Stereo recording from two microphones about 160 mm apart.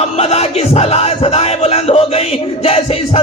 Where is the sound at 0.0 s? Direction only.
40° left (ahead or behind).